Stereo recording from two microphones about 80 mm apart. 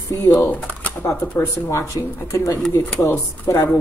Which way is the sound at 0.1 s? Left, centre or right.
Left.